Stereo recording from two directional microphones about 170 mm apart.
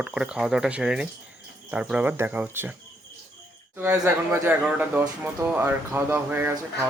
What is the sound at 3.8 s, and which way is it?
Speech, 15° right (ahead or behind).